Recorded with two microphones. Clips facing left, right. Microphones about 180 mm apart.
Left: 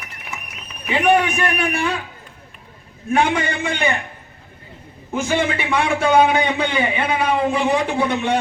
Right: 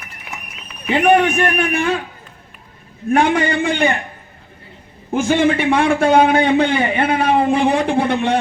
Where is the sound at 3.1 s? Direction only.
50° right (ahead or behind).